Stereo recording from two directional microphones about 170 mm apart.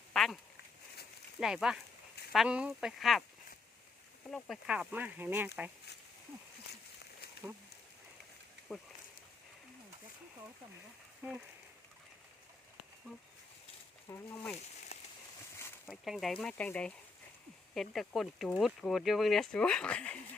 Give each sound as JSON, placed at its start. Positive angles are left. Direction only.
{"t": 0.1, "sound": "duck", "side_deg": 0}
{"t": 1.4, "sound": "speech", "side_deg": 0}
{"t": 4.3, "sound": "speech", "side_deg": 0}
{"t": 7.4, "sound": "speech", "side_deg": -5}
{"t": 11.2, "sound": "speech", "side_deg": -15}
{"t": 14.1, "sound": "speech", "side_deg": 15}
{"t": 14.9, "sound": "a sound", "side_deg": 35}
{"t": 15.9, "sound": "speech", "side_deg": 0}